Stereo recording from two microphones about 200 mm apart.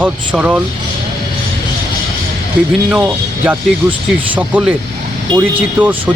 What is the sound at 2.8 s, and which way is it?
Speech, 5° right (ahead or behind).